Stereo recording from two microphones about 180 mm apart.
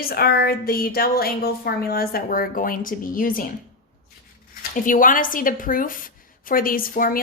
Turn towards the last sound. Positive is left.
turn(degrees=50)  # may be behind; listen again after turning